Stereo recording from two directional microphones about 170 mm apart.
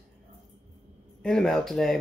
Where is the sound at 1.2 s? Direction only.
Centre (ahead or behind).